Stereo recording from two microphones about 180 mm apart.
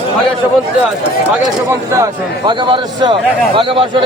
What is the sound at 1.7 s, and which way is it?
A man's voice, 15° right (ahead or behind).